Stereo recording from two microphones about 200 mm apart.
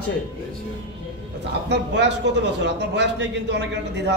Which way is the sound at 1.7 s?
60° right (ahead or behind).